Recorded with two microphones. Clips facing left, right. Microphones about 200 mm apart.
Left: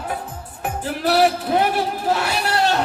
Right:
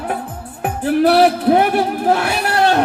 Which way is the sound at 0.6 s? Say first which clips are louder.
Right 9 dB; 55° right (ahead or behind).